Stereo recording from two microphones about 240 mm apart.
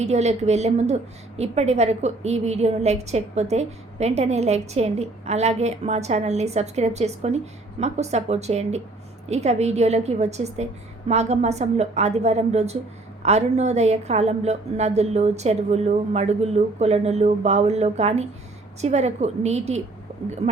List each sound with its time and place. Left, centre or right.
0.0 s a woman's voice: right